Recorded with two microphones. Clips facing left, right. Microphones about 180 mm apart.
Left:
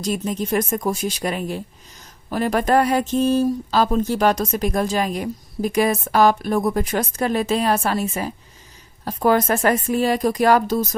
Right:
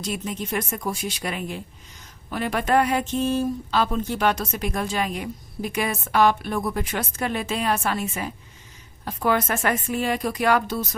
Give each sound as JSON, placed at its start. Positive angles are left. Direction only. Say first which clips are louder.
{"t": 0.0, "sound": "speech", "louder": "left 6 dB", "side_deg": 40}